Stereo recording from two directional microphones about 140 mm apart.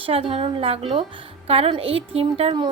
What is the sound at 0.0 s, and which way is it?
A woman's voice, 40° right (ahead or behind).